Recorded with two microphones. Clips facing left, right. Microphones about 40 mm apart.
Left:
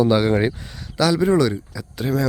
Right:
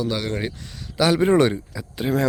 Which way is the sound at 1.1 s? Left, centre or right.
Right.